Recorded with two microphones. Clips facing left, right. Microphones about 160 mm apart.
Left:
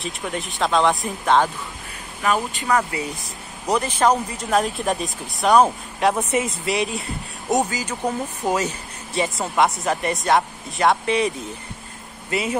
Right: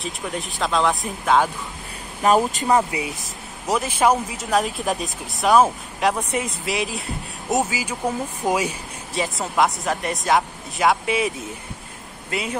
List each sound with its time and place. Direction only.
0.0 s speech: centre (ahead or behind)
2.2 s speech: 35° right (ahead or behind)
2.7 s speech: 20° right (ahead or behind)
3.6 s speech: 5° right (ahead or behind)
9.1 s speech: centre (ahead or behind)